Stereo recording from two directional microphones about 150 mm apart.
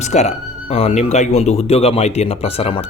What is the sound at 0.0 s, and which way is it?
Speech, 50° left (ahead or behind).